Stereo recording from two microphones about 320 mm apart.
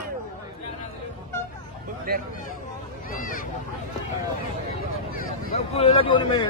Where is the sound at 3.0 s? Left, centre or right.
Left.